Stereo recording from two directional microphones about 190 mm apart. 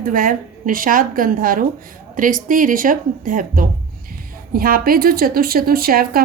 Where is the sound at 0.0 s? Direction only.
45° right (ahead or behind).